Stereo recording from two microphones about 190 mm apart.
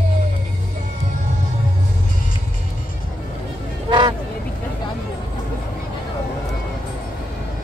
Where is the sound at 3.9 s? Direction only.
25° right (ahead or behind).